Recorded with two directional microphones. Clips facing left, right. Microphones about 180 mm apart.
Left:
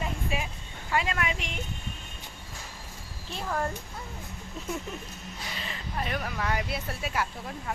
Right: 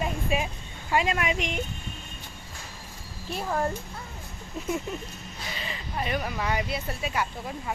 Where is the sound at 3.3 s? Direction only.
15° right (ahead or behind).